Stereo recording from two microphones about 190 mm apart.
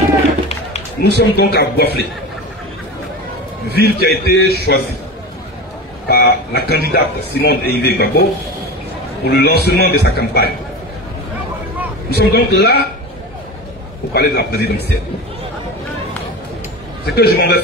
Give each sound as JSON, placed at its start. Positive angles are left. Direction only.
{"t": 1.0, "sound": "a man's voice", "side_deg": 60}
{"t": 3.8, "sound": "a man's voice", "side_deg": 60}
{"t": 6.0, "sound": "a sound", "side_deg": 55}
{"t": 6.9, "sound": "a man's voice", "side_deg": 55}
{"t": 12.1, "sound": "a man's voice", "side_deg": 60}
{"t": 14.1, "sound": "a man's voice", "side_deg": 60}
{"t": 17.1, "sound": "a man's voice", "side_deg": 55}